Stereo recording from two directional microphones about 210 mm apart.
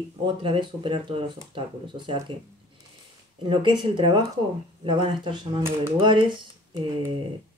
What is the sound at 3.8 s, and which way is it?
Speech, 25° right (ahead or behind).